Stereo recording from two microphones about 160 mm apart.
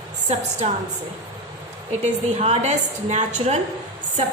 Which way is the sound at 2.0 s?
45° right (ahead or behind).